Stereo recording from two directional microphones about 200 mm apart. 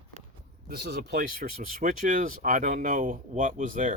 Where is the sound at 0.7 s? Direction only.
55° right (ahead or behind).